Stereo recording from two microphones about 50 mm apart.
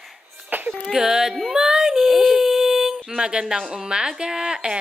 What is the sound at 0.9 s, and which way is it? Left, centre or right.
Speech, centre.